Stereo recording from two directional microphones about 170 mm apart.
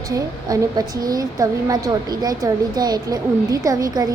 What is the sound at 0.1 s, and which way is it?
A woman's voice, 20° right (ahead or behind).